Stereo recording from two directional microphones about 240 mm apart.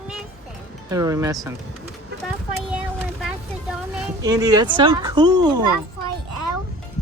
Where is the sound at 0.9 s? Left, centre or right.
Centre.